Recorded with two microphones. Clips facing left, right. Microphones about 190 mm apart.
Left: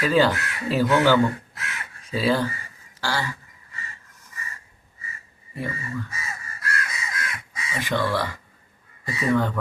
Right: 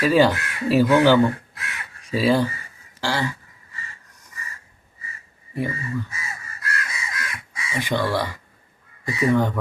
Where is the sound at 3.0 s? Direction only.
15° right (ahead or behind).